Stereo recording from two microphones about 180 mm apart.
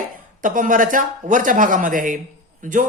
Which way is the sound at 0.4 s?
50° right (ahead or behind).